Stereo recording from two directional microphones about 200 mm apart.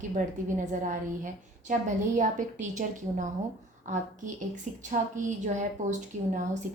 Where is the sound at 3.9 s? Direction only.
35° right (ahead or behind).